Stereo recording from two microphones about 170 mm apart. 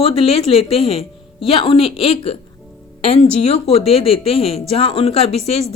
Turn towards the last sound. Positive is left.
turn(degrees=40)  # may be behind; listen again after turning